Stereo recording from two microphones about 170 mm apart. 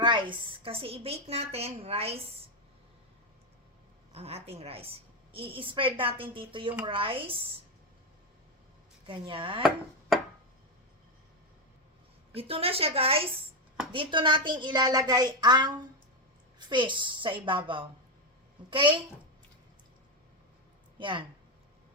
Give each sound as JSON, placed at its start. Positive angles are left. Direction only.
{"t": 0.0, "sound": "a woman's voice", "side_deg": -25}
{"t": 4.1, "sound": "a woman's voice", "side_deg": -35}
{"t": 9.0, "sound": "a woman's voice", "side_deg": -30}
{"t": 12.3, "sound": "a woman's voice", "side_deg": -35}
{"t": 21.0, "sound": "speech", "side_deg": -30}